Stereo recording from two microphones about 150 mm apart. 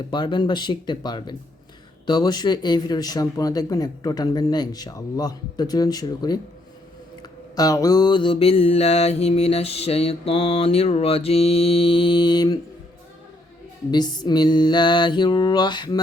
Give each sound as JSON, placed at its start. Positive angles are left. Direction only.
{"t": 0.1, "sound": "mantra", "side_deg": 30}
{"t": 2.0, "sound": "speech", "side_deg": 25}
{"t": 7.2, "sound": "mantra", "side_deg": 25}
{"t": 13.9, "sound": "speech", "side_deg": 30}